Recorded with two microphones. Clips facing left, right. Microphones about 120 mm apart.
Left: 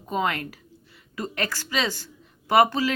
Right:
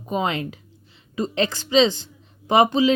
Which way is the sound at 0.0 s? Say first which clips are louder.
Right 2 dB; 20° right (ahead or behind).